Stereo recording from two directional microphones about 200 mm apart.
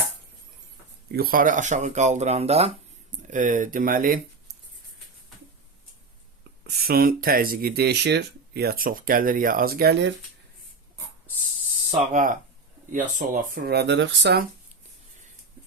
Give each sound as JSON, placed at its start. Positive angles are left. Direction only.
{"t": 1.1, "sound": "speech", "side_deg": -45}
{"t": 6.7, "sound": "speech", "side_deg": -50}
{"t": 11.9, "sound": "speech", "side_deg": -35}